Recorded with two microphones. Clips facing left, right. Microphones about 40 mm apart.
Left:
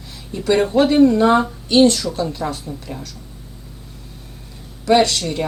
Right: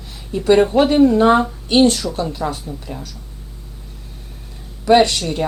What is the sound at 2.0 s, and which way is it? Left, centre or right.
Speech, centre.